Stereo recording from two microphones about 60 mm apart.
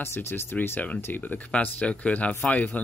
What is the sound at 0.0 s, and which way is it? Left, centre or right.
Speech, left.